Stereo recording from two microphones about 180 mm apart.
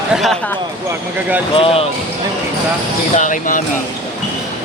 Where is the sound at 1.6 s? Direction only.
30° left (ahead or behind).